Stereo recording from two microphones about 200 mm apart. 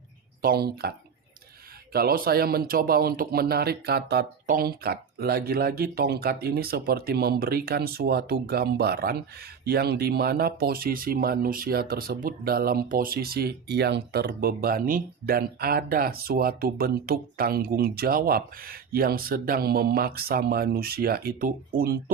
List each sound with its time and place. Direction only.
0.4 s speech: 50° right (ahead or behind)